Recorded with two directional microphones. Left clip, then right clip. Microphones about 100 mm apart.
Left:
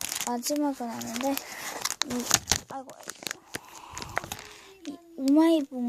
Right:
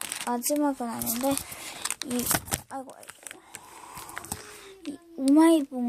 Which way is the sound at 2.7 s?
45° right (ahead or behind).